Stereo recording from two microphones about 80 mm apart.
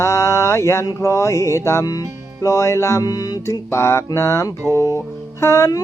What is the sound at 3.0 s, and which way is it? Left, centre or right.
Music, left.